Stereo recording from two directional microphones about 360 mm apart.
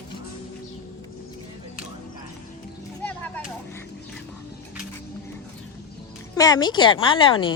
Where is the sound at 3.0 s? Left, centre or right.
Centre.